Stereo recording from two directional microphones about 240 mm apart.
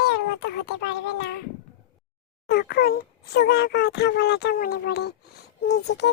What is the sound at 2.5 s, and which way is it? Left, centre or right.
Speech, left.